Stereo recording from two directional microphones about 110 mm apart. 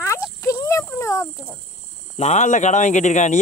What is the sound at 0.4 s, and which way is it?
Insect, 25° left (ahead or behind).